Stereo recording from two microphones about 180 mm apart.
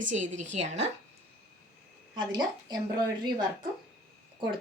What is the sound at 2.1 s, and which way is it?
Speech, 25° right (ahead or behind).